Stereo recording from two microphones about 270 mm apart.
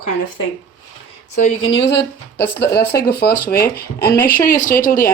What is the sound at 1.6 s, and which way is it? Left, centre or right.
Speech, left.